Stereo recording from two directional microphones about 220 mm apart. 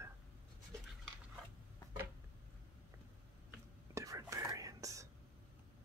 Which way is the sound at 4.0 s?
15° right (ahead or behind).